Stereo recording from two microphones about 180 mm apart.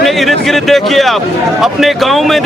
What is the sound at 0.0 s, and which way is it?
A man's voice, centre (ahead or behind).